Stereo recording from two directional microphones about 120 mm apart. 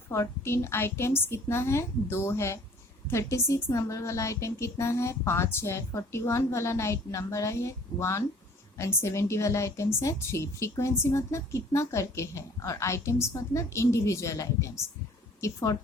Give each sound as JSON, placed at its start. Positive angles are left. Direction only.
{"t": 0.1, "sound": "a woman's voice", "side_deg": 20}